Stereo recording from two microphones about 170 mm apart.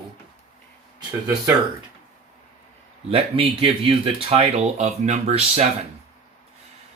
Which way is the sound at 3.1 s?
35° right (ahead or behind).